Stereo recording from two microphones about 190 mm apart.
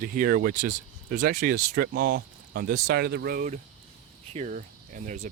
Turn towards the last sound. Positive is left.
turn(degrees=-45)  # may be behind; listen again after turning